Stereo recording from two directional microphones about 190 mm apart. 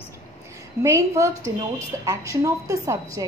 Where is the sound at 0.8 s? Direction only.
15° right (ahead or behind).